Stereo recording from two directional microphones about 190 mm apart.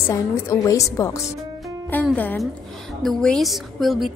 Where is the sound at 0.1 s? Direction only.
15° left (ahead or behind).